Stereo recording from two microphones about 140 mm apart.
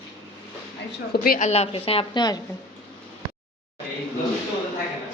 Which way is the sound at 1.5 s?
45° left (ahead or behind).